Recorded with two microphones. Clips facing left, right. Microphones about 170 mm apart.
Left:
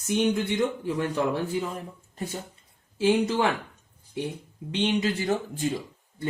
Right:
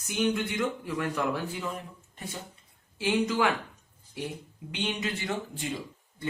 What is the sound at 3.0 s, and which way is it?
Speech, 35° left (ahead or behind).